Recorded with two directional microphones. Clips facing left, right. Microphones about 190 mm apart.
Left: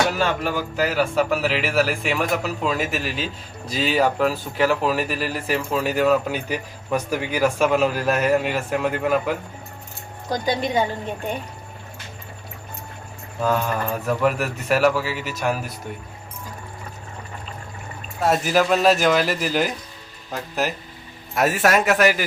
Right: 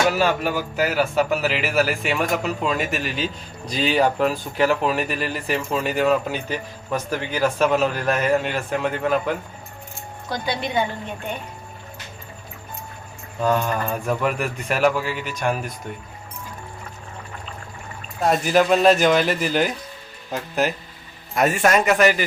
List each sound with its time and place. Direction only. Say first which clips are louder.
0.2 s speech: right 2 dB; 5° right (ahead or behind)
10.4 s a woman's voice: left 2 dB; 40° left (ahead or behind)
13.4 s speech: right 1 dB; 5° left (ahead or behind)
18.2 s speech: right 1 dB; centre (ahead or behind)